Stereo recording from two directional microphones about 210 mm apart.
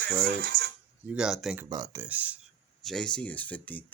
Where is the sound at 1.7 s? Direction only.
15° right (ahead or behind).